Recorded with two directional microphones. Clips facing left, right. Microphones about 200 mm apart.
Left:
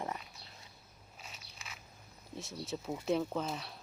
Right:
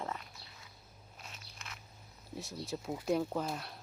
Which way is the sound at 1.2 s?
5° left (ahead or behind).